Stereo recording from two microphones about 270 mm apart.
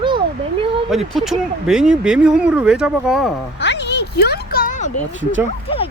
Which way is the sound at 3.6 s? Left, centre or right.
Left.